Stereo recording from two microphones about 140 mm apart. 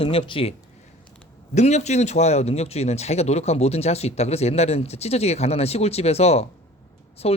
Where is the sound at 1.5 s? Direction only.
55° left (ahead or behind).